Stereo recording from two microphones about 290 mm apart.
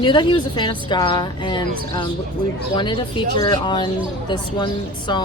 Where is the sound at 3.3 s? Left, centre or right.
Centre.